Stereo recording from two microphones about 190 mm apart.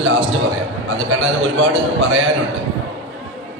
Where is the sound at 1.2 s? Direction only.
75° right (ahead or behind).